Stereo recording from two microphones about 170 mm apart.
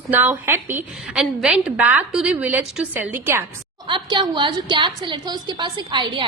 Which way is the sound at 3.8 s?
30° right (ahead or behind).